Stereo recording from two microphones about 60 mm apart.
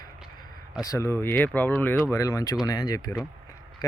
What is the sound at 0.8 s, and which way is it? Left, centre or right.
Speech, left.